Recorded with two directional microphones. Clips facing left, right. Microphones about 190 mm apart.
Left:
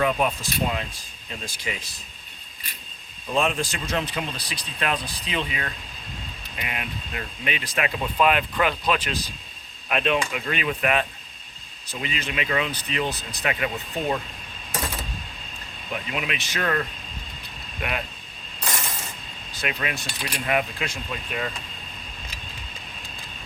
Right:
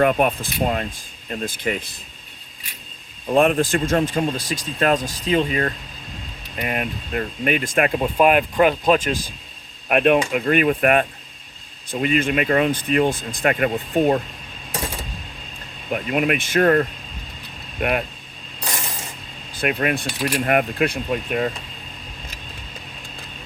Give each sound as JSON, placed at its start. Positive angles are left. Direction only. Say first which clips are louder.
{"t": 0.0, "sound": "speech", "louder": "right 5 dB", "side_deg": -55}
{"t": 3.3, "sound": "speech", "louder": "right 8 dB", "side_deg": -55}
{"t": 9.9, "sound": "speech", "louder": "right 7 dB", "side_deg": -55}
{"t": 15.9, "sound": "speech", "louder": "right 9 dB", "side_deg": -50}
{"t": 19.5, "sound": "speech", "louder": "right 8 dB", "side_deg": -55}